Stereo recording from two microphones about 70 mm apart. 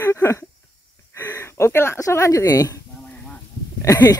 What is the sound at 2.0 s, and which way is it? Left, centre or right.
Speech, left.